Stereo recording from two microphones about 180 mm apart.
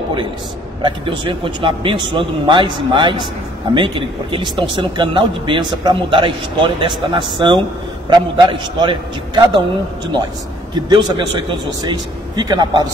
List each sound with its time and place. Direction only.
0.8 s speech: 25° right (ahead or behind)
10.7 s speech: 25° right (ahead or behind)